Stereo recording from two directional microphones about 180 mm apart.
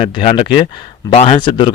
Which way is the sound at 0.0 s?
30° left (ahead or behind).